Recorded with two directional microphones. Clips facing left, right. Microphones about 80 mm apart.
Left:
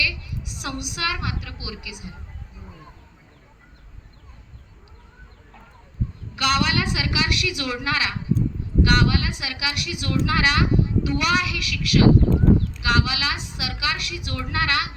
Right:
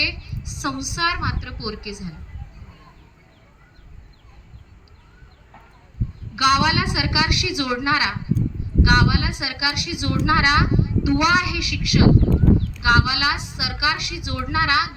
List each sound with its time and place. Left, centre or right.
0.0 s a sound: right
1.6 s a woman's voice: right
6.3 s a woman's voice: centre